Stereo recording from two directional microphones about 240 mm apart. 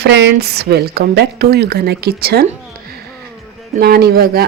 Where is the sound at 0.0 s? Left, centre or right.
Right.